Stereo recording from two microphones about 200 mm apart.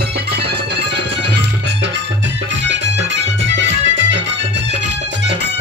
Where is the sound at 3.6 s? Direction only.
65° right (ahead or behind).